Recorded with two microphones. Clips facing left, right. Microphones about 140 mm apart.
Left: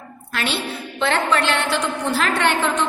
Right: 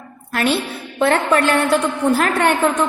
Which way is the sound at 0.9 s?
50° right (ahead or behind).